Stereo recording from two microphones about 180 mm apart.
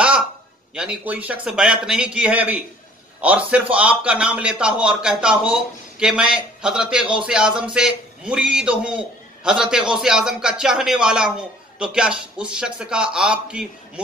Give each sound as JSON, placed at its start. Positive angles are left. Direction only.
{"t": 0.7, "sound": "a man's voice", "side_deg": -5}